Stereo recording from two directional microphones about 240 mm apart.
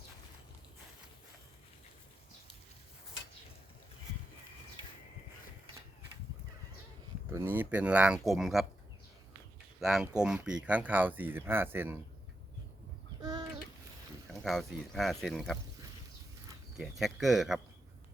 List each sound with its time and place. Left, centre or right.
7.3 s speech: centre
9.8 s speech: centre
13.2 s a sound: centre
14.4 s speech: centre
16.7 s speech: centre